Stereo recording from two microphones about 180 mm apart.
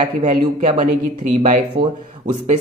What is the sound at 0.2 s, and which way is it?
Speech, 40° right (ahead or behind).